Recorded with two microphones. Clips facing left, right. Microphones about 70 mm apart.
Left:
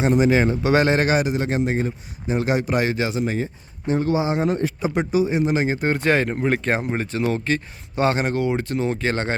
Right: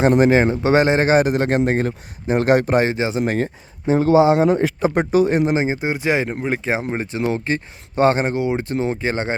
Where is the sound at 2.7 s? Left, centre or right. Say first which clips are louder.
Right 4 dB; right.